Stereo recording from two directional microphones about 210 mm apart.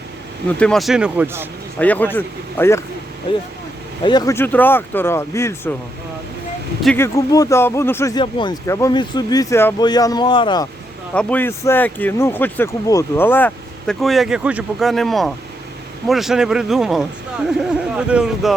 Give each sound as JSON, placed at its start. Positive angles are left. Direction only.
{"t": 0.6, "sound": "speech", "side_deg": 0}
{"t": 1.8, "sound": "speech", "side_deg": 10}
{"t": 4.0, "sound": "speech", "side_deg": 20}
{"t": 6.8, "sound": "speech", "side_deg": 10}
{"t": 11.1, "sound": "speech", "side_deg": 5}